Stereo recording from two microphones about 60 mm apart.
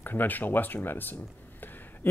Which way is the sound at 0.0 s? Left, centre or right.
Left.